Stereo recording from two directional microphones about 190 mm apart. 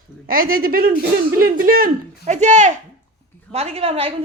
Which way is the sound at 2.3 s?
40° right (ahead or behind).